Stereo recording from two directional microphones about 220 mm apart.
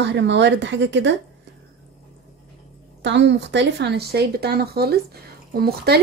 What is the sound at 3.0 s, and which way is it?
Speech, 55° right (ahead or behind).